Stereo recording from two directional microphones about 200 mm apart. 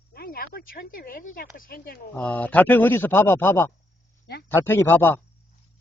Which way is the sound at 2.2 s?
10° left (ahead or behind).